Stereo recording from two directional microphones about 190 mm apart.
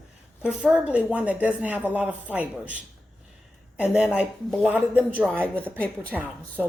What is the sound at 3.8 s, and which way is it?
Speech, 5° right (ahead or behind).